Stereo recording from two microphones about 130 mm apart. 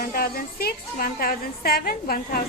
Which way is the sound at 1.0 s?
90° left.